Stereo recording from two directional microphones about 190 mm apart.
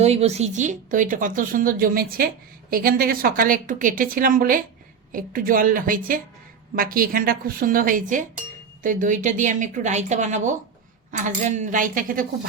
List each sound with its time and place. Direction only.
0.0 s a woman's voice: 35° right (ahead or behind)